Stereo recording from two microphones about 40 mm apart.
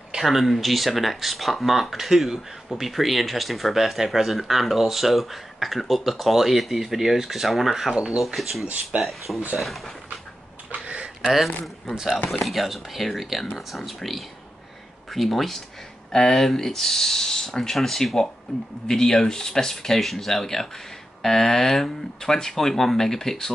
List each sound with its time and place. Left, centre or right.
0.2 s speech: centre
7.9 s speech: right
8.4 s speech: centre
8.9 s speech: right
9.6 s speech: centre
11.3 s speech: centre
15.0 s speech: centre